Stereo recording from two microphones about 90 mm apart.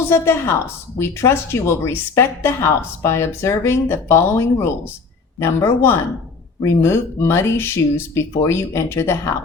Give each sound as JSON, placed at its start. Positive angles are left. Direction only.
{"t": 0.1, "sound": "speech", "side_deg": 25}